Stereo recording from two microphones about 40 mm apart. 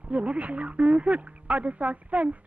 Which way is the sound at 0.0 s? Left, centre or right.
Right.